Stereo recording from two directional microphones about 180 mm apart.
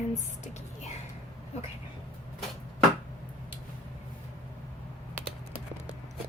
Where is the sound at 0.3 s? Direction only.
40° left (ahead or behind).